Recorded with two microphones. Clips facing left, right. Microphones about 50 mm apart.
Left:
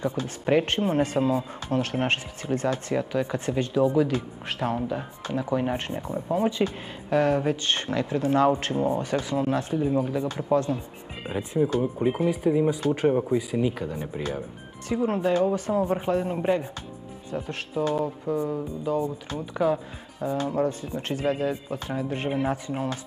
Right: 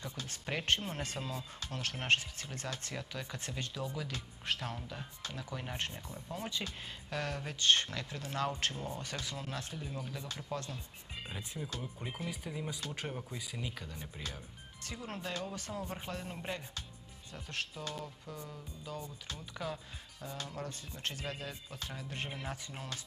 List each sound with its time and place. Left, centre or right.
0.0 s speech: left